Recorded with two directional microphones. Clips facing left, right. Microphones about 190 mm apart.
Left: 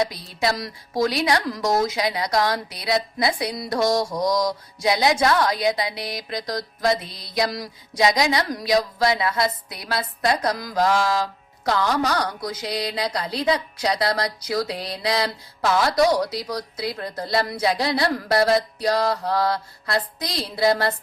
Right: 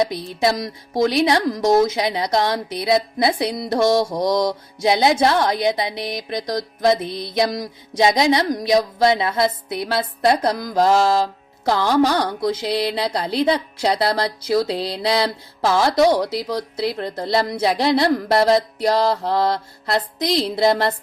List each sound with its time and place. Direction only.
0.1 s speech: 20° right (ahead or behind)